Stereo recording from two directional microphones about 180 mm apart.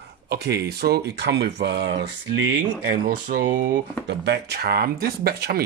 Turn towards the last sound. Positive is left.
turn(degrees=-60)  # may be behind; listen again after turning